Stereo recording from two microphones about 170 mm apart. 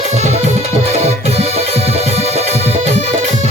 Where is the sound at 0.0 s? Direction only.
40° right (ahead or behind).